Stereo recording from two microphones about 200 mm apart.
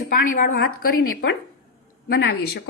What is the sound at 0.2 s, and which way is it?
Speech, 45° left (ahead or behind).